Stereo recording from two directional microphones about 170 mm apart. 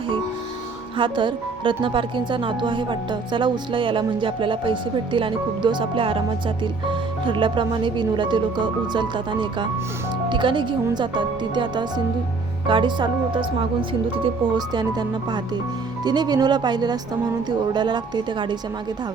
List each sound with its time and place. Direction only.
0.9 s speech: 30° right (ahead or behind)